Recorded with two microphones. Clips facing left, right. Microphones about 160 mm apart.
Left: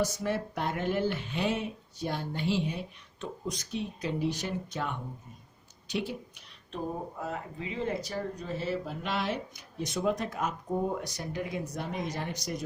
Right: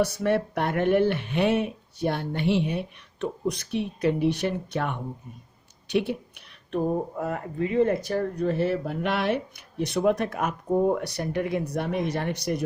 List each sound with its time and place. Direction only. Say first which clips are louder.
0.0 s speech: right 7 dB; 65° right (ahead or behind)